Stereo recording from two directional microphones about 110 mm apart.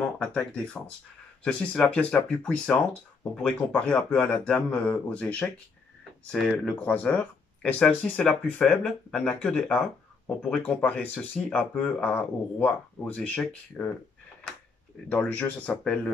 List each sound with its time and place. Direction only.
0.2 s speech: 10° left (ahead or behind)
6.8 s speech: 15° left (ahead or behind)
15.0 s speech: 15° left (ahead or behind)